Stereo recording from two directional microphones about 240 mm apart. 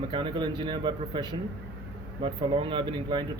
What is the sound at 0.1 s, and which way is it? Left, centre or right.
Speech, centre.